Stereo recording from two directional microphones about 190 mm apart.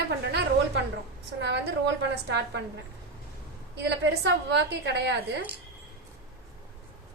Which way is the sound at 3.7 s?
60° right (ahead or behind).